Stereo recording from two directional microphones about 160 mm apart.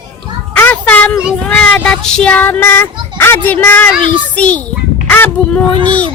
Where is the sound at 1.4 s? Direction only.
5° left (ahead or behind).